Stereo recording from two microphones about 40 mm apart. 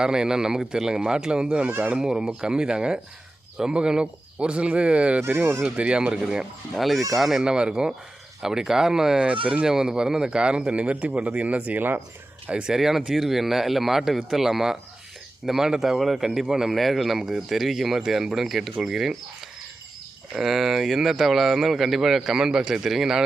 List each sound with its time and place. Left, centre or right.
0.0 s speech: centre
2.0 s speech: centre; by 5.2 s right
5.2 s speech: right
5.7 s speech: right
6.7 s speech: centre
7.4 s speech: right
9.2 s speech: right
9.6 s speech: centre; by 11.8 s right
12.6 s speech: centre
22.4 s speech: centre